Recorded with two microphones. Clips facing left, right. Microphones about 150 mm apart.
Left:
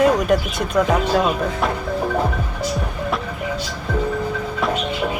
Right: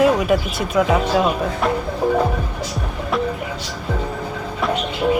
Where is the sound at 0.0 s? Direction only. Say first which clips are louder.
Even; 5° right (ahead or behind).